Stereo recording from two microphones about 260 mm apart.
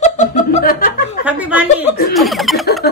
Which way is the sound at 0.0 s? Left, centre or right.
Left.